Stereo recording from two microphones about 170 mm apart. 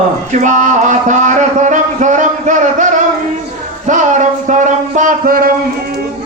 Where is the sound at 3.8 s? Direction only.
45° right (ahead or behind).